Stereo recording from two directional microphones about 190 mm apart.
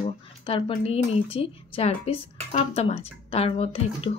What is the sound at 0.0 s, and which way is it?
A woman's voice, 30° left (ahead or behind).